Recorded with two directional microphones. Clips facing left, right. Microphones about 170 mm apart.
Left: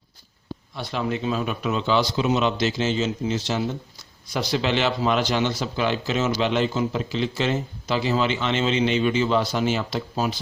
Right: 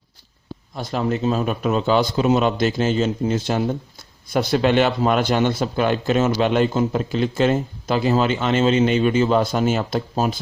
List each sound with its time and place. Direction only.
0.8 s speech: 45° right (ahead or behind)